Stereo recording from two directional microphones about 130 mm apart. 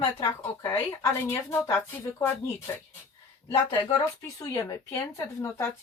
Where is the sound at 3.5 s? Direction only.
35° left (ahead or behind).